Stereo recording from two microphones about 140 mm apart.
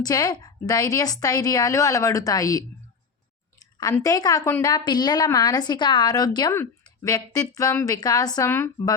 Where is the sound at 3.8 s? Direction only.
25° left (ahead or behind).